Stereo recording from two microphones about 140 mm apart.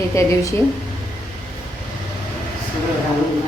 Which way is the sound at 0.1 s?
20° left (ahead or behind).